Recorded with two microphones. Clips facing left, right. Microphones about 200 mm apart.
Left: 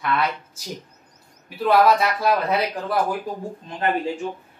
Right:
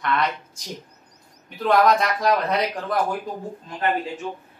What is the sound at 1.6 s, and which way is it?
Speech, 5° left (ahead or behind).